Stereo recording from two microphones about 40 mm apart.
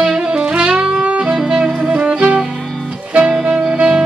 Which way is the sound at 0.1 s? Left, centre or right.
Centre.